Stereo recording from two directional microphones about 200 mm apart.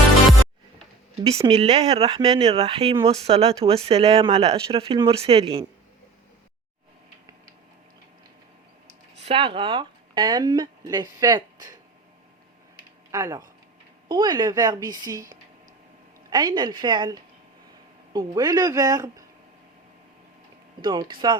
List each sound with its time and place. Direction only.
1.5 s speech: 30° right (ahead or behind)
9.2 s speech: 30° right (ahead or behind)
13.1 s speech: 15° right (ahead or behind)
20.8 s speech: 20° right (ahead or behind)